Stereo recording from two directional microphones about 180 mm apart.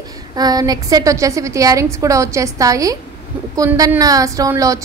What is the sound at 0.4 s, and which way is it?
A woman's voice, 20° right (ahead or behind).